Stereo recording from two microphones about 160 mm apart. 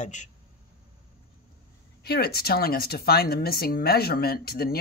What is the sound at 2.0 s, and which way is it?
Speech, 80° left.